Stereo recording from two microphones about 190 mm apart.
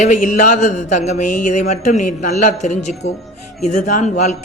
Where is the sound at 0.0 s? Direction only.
40° left (ahead or behind).